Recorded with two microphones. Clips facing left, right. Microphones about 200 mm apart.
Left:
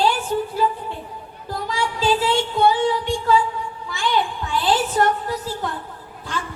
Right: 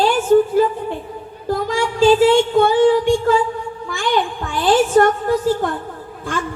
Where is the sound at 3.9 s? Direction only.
50° right (ahead or behind).